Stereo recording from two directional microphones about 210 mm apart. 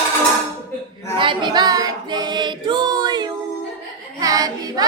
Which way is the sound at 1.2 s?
20° right (ahead or behind).